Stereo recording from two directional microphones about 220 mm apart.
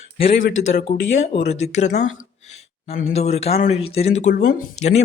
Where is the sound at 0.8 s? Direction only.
30° left (ahead or behind).